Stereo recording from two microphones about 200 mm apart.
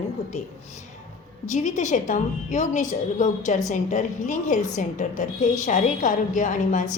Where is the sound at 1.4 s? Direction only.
35° left (ahead or behind).